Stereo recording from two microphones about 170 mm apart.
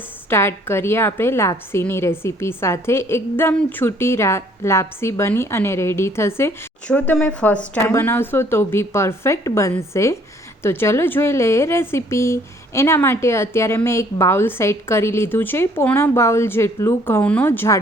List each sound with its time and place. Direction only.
0.3 s a woman's voice: 15° left (ahead or behind)